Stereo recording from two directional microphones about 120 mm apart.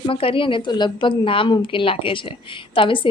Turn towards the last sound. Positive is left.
turn(degrees=45)  # may be behind; listen again after turning